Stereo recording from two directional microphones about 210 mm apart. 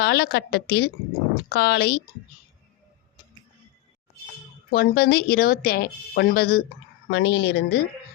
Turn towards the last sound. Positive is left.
turn(degrees=50)  # may be behind; listen again after turning